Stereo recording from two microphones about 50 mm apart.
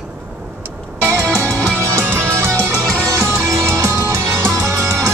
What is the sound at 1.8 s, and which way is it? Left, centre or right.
Music, right.